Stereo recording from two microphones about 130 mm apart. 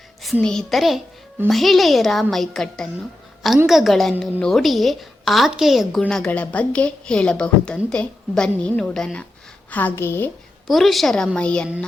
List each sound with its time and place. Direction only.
0.4 s a woman's voice: 5° left (ahead or behind)
10.7 s a woman's voice: centre (ahead or behind)